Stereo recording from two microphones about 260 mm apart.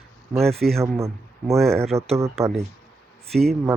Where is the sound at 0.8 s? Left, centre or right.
Centre.